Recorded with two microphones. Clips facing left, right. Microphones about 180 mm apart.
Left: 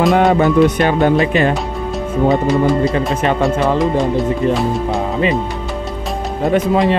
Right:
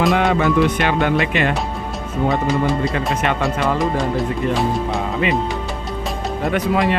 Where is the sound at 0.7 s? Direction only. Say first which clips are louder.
Left 5 dB; 40° left (ahead or behind).